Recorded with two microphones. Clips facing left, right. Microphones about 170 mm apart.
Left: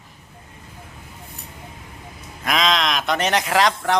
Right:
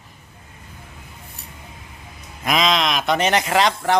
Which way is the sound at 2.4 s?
Centre (ahead or behind).